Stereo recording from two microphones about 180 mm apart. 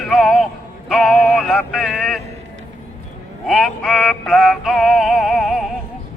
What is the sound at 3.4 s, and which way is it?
Synthetic singing, centre (ahead or behind).